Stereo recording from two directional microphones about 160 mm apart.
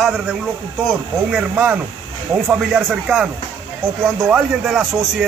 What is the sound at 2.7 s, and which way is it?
A man's voice, centre (ahead or behind).